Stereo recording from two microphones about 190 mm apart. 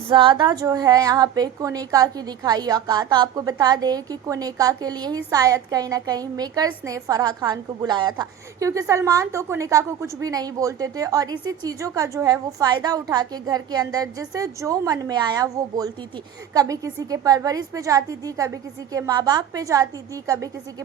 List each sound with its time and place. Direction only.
0.1 s a woman's voice: 25° right (ahead or behind)